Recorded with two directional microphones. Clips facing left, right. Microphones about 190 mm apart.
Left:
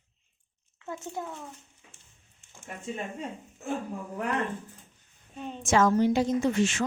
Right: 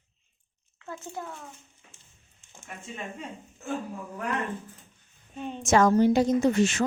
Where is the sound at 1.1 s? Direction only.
10° left (ahead or behind).